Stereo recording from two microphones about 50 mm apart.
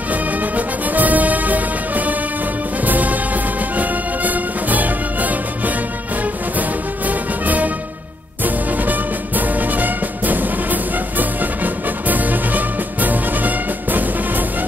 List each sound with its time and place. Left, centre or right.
0.1 s music: right
7.1 s music: right